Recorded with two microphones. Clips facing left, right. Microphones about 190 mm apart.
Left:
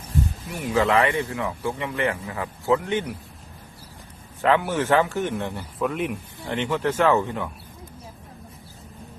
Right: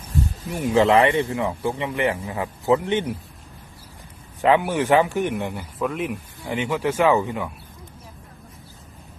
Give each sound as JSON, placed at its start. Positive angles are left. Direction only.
{"t": 0.5, "sound": "speech", "side_deg": -25}
{"t": 4.4, "sound": "speech", "side_deg": -15}
{"t": 5.8, "sound": "speech", "side_deg": 0}